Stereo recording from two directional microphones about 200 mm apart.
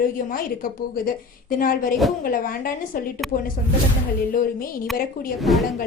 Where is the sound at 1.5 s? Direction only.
45° left (ahead or behind).